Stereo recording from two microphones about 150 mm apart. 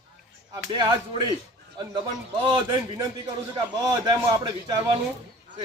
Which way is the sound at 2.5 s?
30° right (ahead or behind).